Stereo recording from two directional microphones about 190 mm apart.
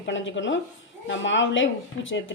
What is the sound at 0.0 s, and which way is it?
Speech, 75° left (ahead or behind).